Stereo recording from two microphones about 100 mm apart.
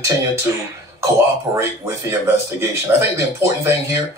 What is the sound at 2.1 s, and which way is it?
Speech, 25° right (ahead or behind).